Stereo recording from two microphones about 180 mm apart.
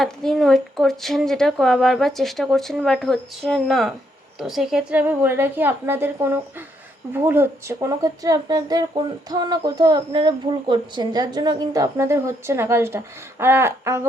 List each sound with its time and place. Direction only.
0.0 s a woman's voice: centre (ahead or behind); by 14.1 s 15° right (ahead or behind)